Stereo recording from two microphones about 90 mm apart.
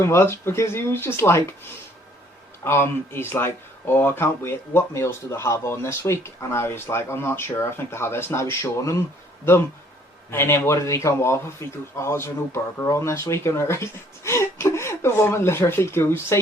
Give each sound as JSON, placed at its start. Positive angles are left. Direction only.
{"t": 0.0, "sound": "speech", "side_deg": 30}
{"t": 2.6, "sound": "speech", "side_deg": 25}
{"t": 10.3, "sound": "a man's voice", "side_deg": 25}